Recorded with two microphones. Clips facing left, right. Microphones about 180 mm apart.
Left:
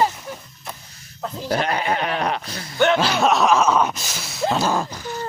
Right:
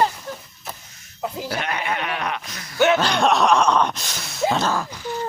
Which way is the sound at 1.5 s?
35° left (ahead or behind).